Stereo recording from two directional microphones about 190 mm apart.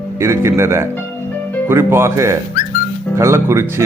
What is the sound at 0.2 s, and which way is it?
Speech, 15° right (ahead or behind).